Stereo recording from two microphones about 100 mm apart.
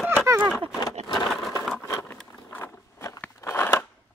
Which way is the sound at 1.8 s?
20° left (ahead or behind).